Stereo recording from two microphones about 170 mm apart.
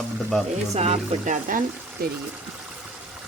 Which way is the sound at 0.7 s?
40° right (ahead or behind).